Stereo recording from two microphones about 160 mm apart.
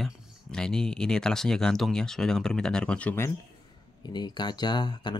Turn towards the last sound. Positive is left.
turn(degrees=25)  # may be behind; listen again after turning